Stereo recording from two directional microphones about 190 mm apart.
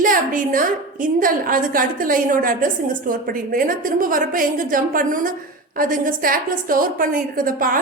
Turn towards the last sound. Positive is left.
turn(degrees=-45)  # may be behind; listen again after turning